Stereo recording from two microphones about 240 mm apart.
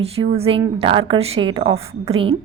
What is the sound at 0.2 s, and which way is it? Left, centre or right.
A woman's voice, right.